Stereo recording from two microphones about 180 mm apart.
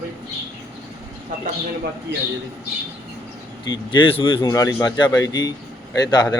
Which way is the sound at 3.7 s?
30° left (ahead or behind).